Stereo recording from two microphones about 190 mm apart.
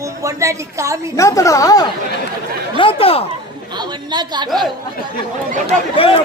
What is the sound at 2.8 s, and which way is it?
Speech, 30° left (ahead or behind).